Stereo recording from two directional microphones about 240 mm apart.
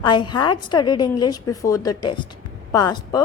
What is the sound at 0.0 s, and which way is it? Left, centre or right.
A woman's voice, centre.